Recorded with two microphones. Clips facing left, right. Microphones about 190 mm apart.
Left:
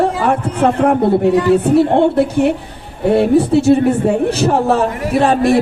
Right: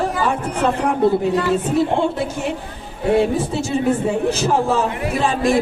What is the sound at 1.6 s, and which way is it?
A woman's voice, 65° left (ahead or behind).